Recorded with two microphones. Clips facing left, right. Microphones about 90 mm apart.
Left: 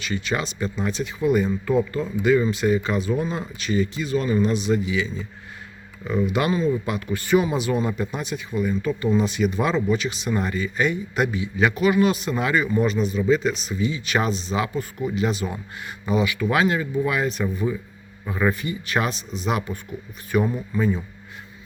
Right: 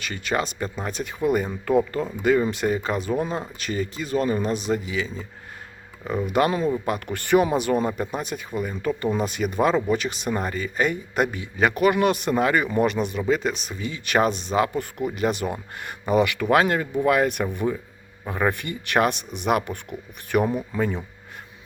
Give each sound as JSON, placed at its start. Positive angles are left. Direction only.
{"t": 0.0, "sound": "speech", "side_deg": -50}
{"t": 12.6, "sound": "speech", "side_deg": -60}